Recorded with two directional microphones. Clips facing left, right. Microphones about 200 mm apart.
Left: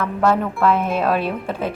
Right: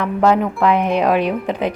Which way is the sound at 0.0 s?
15° right (ahead or behind).